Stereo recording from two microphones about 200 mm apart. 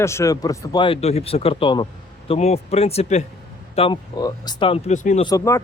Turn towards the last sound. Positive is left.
turn(degrees=15)  # may be behind; listen again after turning